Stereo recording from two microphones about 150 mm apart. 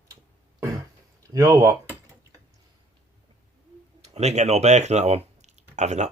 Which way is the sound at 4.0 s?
50° right (ahead or behind).